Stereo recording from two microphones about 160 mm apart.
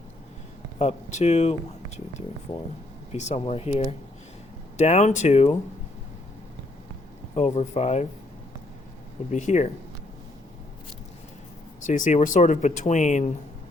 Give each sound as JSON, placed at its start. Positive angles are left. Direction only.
{"t": 0.8, "sound": "speech", "side_deg": 40}
{"t": 7.3, "sound": "speech", "side_deg": 45}
{"t": 9.3, "sound": "speech", "side_deg": 50}
{"t": 11.9, "sound": "speech", "side_deg": 55}